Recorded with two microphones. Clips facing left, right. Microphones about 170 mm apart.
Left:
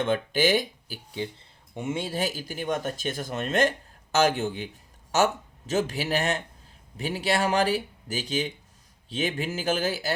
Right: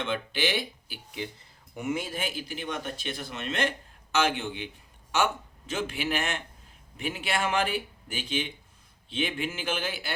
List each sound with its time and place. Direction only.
0.0 s speech: 45° left (ahead or behind)